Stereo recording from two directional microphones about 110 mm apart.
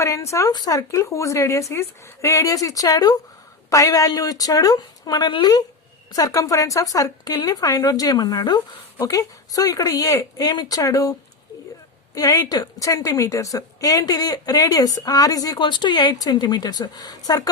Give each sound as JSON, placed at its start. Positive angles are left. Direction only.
{"t": 0.0, "sound": "a woman's voice", "side_deg": 25}
{"t": 12.1, "sound": "a woman's voice", "side_deg": 35}